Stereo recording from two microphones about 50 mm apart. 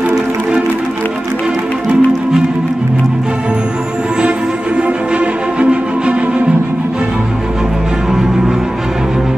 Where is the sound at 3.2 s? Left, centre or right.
Centre.